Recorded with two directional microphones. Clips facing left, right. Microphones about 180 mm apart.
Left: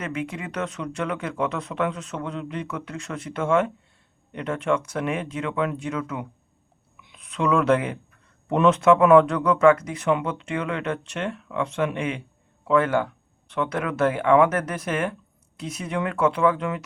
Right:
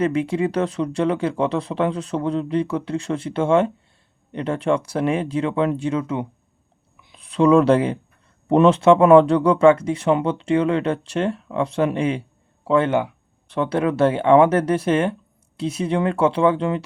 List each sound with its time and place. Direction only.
0.0 s speech: 30° right (ahead or behind)